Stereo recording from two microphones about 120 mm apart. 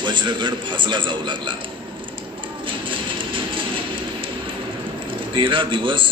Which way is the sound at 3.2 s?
45° right (ahead or behind).